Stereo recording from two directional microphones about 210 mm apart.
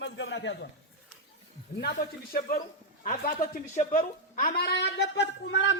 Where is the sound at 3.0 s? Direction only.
40° left (ahead or behind).